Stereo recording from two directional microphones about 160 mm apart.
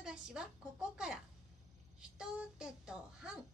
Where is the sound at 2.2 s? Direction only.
5° right (ahead or behind).